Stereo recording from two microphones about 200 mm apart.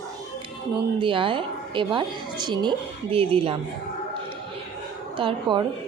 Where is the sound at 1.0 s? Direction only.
25° right (ahead or behind).